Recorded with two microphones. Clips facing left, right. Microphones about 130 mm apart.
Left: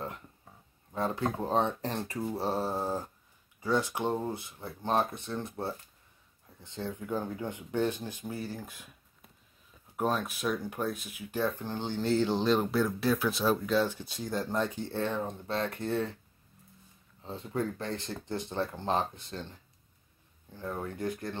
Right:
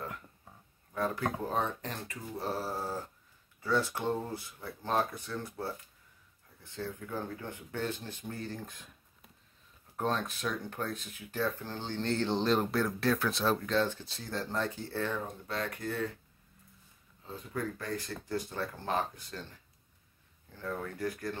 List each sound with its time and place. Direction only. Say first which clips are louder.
0.9 s speech: left 2 dB; 25° left (ahead or behind)
17.2 s speech: left 4 dB; 30° left (ahead or behind)